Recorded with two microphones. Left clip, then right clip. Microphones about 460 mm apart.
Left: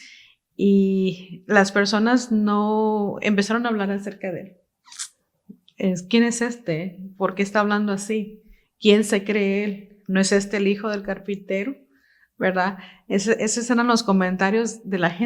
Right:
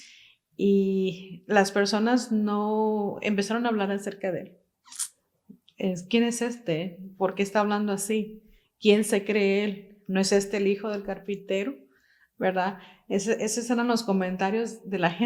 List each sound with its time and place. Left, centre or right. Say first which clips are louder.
0.0 s speech: left 5 dB; left
4.9 s a sound: left 3 dB; left
5.7 s speech: left 5 dB; left